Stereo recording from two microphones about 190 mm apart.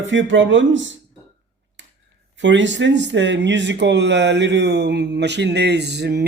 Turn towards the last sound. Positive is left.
turn(degrees=-60)  # may be behind; listen again after turning